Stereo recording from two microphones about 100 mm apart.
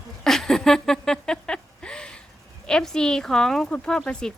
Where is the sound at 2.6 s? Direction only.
5° left (ahead or behind).